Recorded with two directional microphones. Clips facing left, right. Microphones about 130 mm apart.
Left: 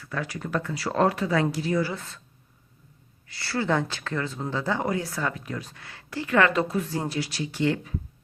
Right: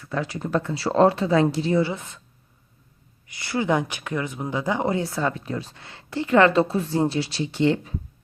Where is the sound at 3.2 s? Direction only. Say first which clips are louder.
Right 3 dB; 20° right (ahead or behind).